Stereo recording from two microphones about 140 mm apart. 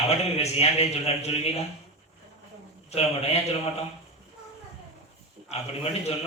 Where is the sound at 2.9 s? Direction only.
50° left (ahead or behind).